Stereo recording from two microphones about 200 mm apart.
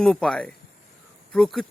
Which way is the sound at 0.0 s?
5° left (ahead or behind).